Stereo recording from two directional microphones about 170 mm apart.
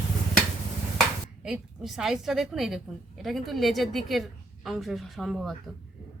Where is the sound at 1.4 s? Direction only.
5° right (ahead or behind).